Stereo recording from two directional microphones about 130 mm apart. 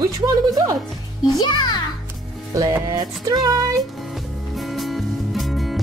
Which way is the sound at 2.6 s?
30° right (ahead or behind).